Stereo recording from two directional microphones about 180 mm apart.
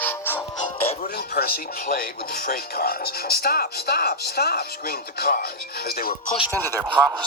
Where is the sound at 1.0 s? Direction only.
55° left (ahead or behind).